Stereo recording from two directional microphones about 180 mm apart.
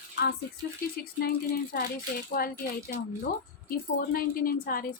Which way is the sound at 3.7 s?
55° left (ahead or behind).